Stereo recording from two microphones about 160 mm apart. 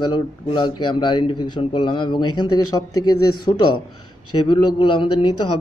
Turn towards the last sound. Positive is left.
turn(degrees=30)  # may be behind; listen again after turning